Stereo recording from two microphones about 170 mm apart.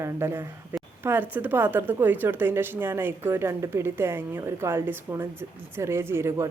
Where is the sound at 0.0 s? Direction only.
15° right (ahead or behind).